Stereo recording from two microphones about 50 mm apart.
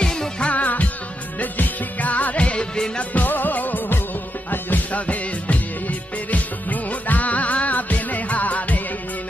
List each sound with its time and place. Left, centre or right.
0.0 s music: centre
0.5 s music: left
3.0 s music: left